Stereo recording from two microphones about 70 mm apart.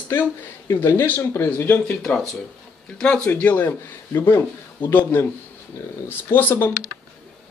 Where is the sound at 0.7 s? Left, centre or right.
Left.